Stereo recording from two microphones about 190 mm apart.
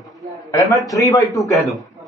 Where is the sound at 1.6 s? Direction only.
Centre (ahead or behind).